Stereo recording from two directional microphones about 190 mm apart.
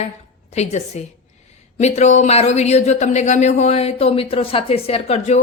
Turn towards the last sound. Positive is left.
turn(degrees=35)  # may be behind; listen again after turning